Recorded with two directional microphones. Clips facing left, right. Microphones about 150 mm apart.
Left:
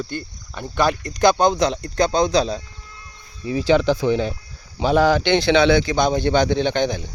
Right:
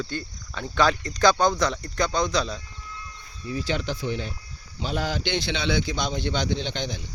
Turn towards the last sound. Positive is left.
turn(degrees=60)  # may be behind; listen again after turning